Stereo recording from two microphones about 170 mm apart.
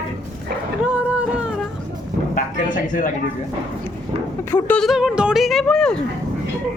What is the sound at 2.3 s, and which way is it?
Speech, 50° left (ahead or behind).